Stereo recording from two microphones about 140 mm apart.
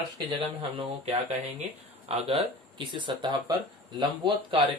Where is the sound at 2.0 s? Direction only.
40° right (ahead or behind).